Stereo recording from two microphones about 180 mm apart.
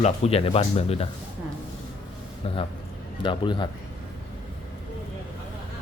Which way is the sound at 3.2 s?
25° left (ahead or behind).